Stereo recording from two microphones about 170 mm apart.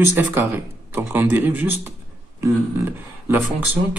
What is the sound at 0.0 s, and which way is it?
Speech, 15° right (ahead or behind).